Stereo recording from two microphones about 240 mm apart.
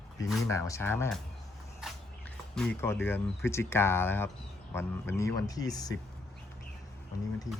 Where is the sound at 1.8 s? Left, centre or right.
Centre.